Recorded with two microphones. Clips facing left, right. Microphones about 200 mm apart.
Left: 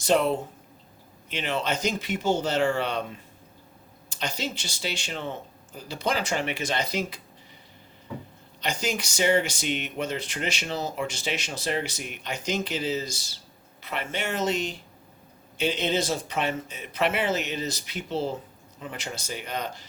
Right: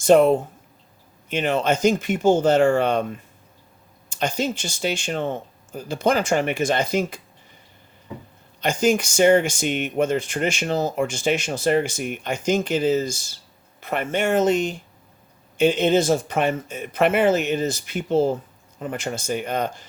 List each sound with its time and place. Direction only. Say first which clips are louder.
0.0 s speech: right 8 dB; 50° right (ahead or behind)
8.6 s speech: right 10 dB; 50° right (ahead or behind)